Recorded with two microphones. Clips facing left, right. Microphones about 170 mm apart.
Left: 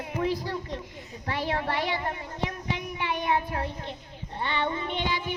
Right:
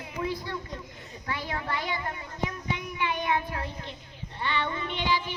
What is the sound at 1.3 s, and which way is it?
Speech, 35° left (ahead or behind).